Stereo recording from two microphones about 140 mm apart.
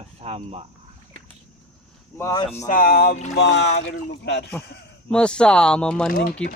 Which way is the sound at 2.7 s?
90° left.